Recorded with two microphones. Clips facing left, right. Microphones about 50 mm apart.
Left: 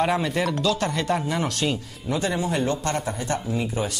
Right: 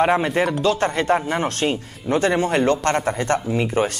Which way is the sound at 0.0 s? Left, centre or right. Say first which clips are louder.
Right 5 dB; right.